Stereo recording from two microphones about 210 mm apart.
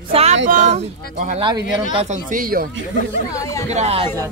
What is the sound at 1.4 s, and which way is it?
Speech, 20° right (ahead or behind).